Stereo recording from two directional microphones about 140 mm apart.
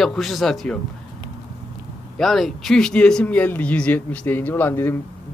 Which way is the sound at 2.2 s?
Centre (ahead or behind).